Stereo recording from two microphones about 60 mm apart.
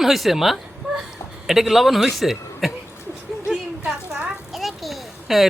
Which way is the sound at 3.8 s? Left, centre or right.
Right.